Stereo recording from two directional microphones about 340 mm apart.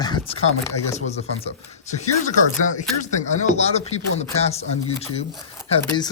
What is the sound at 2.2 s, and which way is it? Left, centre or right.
Speech, left.